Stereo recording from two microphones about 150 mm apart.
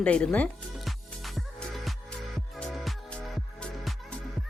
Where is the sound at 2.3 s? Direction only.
Centre (ahead or behind).